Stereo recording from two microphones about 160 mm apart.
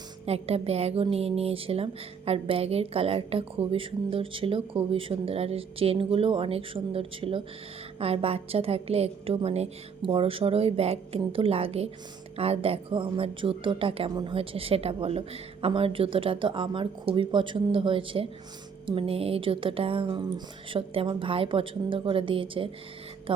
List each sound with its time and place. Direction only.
0.3 s a woman's voice: 40° right (ahead or behind)